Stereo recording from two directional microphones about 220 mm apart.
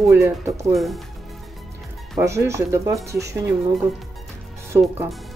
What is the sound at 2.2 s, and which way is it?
Speech, 15° right (ahead or behind).